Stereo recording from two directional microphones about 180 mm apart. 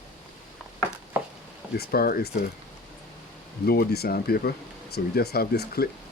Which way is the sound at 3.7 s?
60° left (ahead or behind).